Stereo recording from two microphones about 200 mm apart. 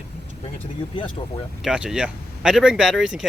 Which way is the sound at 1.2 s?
25° left (ahead or behind).